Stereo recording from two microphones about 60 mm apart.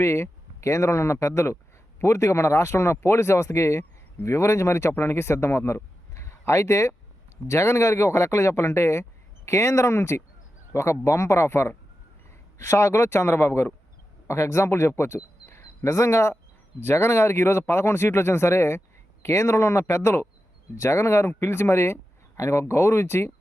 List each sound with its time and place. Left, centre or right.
0.0 s speech: left